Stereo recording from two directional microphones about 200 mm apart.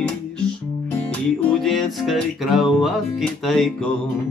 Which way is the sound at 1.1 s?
Centre (ahead or behind).